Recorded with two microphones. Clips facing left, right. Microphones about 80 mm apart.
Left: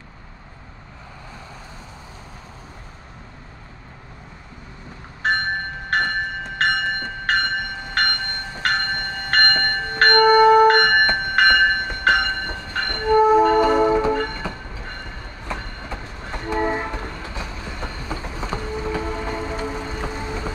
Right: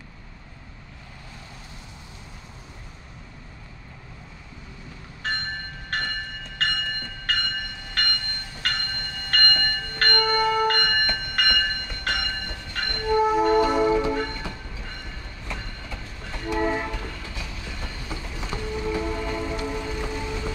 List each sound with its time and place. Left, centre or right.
5.2 s train: left
7.9 s train: left